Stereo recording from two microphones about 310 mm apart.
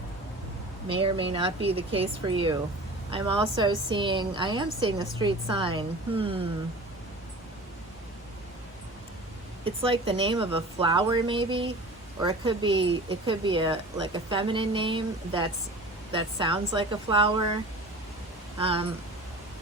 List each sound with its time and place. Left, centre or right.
0.9 s speech: centre
9.6 s speech: centre
18.6 s speech: centre